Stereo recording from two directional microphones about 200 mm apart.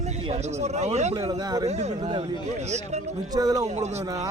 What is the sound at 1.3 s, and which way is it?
Speech, 20° right (ahead or behind).